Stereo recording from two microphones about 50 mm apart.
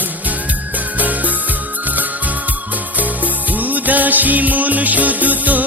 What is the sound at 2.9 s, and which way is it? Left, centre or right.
Music, right.